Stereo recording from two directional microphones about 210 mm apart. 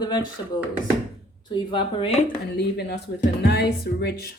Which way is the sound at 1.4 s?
20° left (ahead or behind).